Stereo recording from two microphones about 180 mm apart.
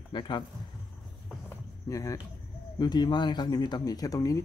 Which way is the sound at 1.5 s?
15° left (ahead or behind).